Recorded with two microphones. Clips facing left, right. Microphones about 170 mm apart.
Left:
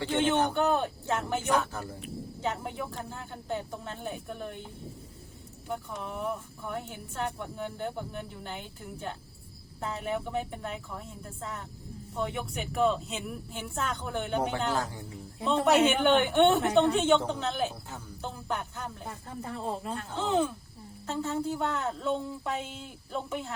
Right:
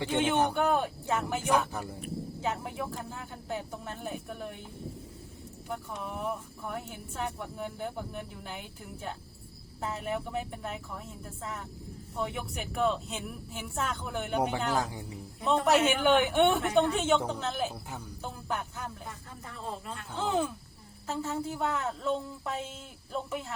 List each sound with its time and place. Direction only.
0.0 s speech: 10° right (ahead or behind)
2.4 s speech: 5° right (ahead or behind)
5.7 s speech: centre (ahead or behind)
12.2 s speech: centre (ahead or behind); by 15.0 s 15° right (ahead or behind)
15.6 s speech: centre (ahead or behind)
19.4 s speech: 30° left (ahead or behind)
20.1 s speech: 5° right (ahead or behind)